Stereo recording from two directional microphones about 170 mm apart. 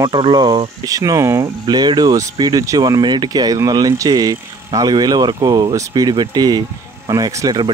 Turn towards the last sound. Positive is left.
turn(degrees=-25)  # may be behind; listen again after turning